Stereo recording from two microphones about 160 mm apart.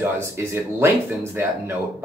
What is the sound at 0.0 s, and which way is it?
Speech, 15° right (ahead or behind).